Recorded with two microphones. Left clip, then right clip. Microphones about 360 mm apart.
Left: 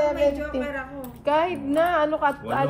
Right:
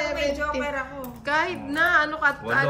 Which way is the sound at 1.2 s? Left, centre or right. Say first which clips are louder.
Left 2 dB; centre.